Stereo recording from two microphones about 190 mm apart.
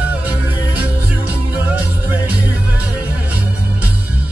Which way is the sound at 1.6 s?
10° right (ahead or behind).